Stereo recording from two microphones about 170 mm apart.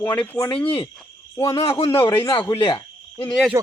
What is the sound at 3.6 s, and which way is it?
Speech, 20° right (ahead or behind).